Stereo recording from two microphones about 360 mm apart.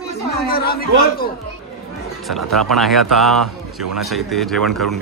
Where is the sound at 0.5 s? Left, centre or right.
Left.